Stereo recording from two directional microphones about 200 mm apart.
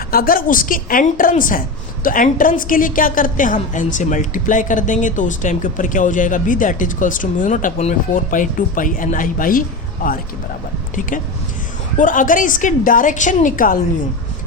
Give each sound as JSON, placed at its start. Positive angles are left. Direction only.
{"t": 0.1, "sound": "a woman's voice", "side_deg": 45}
{"t": 11.9, "sound": "a woman's voice", "side_deg": 40}